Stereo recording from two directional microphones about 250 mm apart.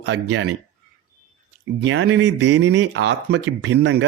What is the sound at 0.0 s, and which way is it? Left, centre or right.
Speech, right.